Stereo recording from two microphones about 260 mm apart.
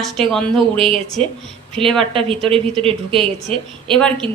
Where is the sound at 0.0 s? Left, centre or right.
Centre.